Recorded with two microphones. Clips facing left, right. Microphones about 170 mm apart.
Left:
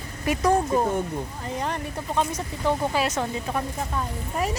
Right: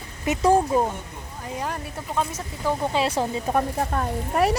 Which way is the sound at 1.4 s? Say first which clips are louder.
Right 2 dB; 5° right (ahead or behind).